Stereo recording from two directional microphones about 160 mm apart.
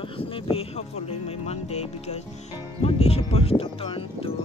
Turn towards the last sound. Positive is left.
turn(degrees=35)  # may be behind; listen again after turning